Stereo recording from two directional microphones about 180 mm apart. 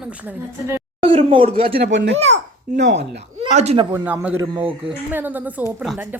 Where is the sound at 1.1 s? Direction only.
35° right (ahead or behind).